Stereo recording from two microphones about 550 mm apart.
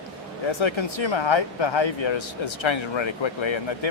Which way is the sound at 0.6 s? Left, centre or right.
Left.